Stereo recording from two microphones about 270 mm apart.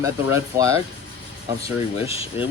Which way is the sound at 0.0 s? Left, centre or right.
Centre.